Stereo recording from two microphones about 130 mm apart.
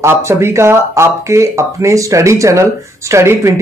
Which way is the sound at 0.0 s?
20° right (ahead or behind).